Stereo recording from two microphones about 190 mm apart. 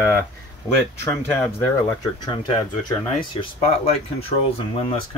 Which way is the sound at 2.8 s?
25° left (ahead or behind).